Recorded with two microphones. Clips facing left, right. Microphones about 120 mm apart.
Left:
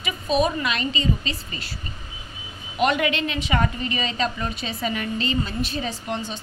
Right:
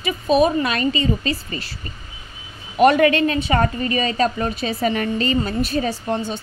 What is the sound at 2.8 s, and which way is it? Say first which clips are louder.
A woman's voice: right 8 dB; 45° right (ahead or behind).